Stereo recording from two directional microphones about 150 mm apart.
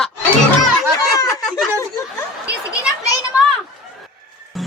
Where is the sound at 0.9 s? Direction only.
25° left (ahead or behind).